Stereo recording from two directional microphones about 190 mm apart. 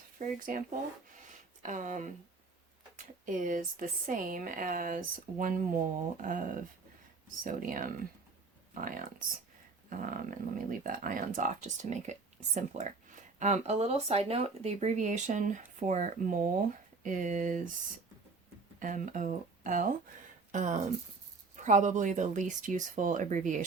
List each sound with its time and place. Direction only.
0.2 s speech: 45° right (ahead or behind)
1.3 s a sound: 40° right (ahead or behind)
3.0 s speech: 45° right (ahead or behind)
18.8 s speech: 45° right (ahead or behind)